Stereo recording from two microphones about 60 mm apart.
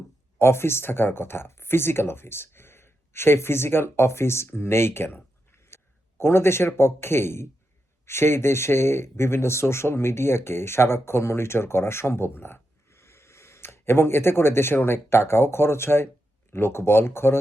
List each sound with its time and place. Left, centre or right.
0.3 s speech: left
13.0 s speech: left